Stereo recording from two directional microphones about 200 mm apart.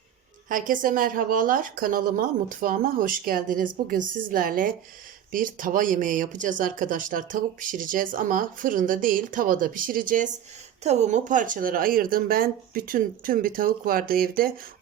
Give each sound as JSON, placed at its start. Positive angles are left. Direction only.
{"t": 0.4, "sound": "speech", "side_deg": -40}